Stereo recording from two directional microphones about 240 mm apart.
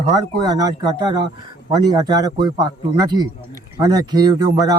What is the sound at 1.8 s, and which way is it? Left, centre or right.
Speech, centre.